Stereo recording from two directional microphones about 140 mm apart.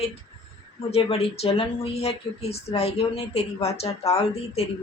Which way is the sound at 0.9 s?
45° left (ahead or behind).